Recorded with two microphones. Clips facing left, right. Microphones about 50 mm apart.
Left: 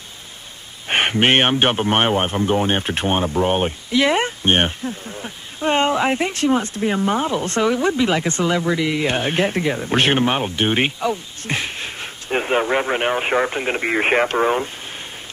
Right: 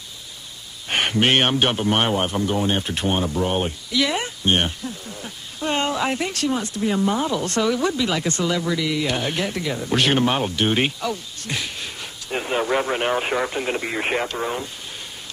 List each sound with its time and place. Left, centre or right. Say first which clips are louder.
0.8 s speech: left 3 dB; left
11.5 s speech: left 4 dB; left